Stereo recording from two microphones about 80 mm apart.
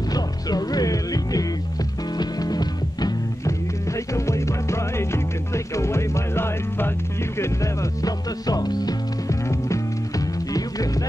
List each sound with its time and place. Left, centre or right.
0.1 s music: left
3.4 s music: left
9.4 s music: left